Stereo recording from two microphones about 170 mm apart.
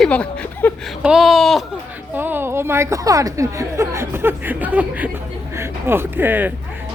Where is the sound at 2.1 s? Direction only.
10° right (ahead or behind).